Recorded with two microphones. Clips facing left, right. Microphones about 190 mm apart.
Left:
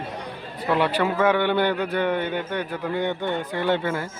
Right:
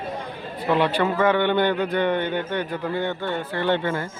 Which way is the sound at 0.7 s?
10° left (ahead or behind).